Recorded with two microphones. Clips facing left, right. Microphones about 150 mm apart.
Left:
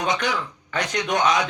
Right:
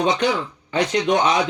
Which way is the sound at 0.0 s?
25° right (ahead or behind).